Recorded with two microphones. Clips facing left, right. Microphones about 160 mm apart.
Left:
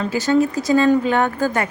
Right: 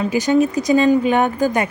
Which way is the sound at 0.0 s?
15° right (ahead or behind).